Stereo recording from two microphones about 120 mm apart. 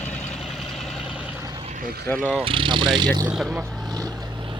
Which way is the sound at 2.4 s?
45° right (ahead or behind).